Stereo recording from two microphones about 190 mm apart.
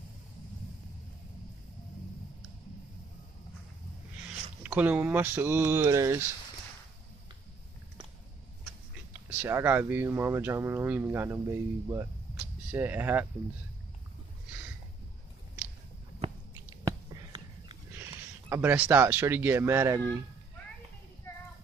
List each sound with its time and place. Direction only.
4.6 s speech: 10° right (ahead or behind)
9.1 s speech: 10° right (ahead or behind)
17.1 s a sound: 20° right (ahead or behind)
18.5 s speech: 10° right (ahead or behind)